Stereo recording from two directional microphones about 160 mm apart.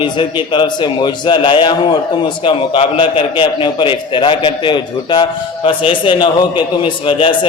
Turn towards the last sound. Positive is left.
turn(degrees=30)  # may be behind; listen again after turning